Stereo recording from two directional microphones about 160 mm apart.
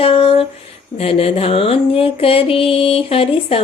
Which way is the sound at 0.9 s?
40° left (ahead or behind).